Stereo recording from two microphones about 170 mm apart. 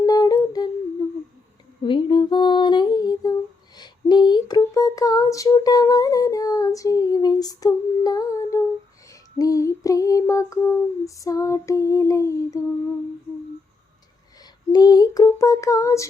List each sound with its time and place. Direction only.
0.0 s humming: 20° left (ahead or behind)
1.8 s music: 30° left (ahead or behind)
9.4 s female singing: 20° left (ahead or behind)
14.7 s child singing: 25° left (ahead or behind)